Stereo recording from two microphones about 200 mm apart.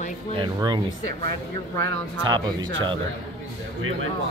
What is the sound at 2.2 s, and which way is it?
Speech, 20° right (ahead or behind).